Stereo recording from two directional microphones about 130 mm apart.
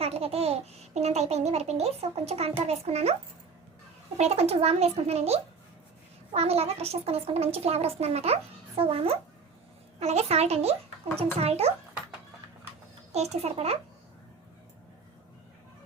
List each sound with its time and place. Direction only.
0.0 s a child's voice: 50° right (ahead or behind)
4.2 s speech: 50° right (ahead or behind)
13.1 s a child's voice: 55° right (ahead or behind)